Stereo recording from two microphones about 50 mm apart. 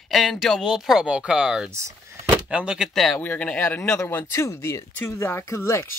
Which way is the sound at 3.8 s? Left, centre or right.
Left.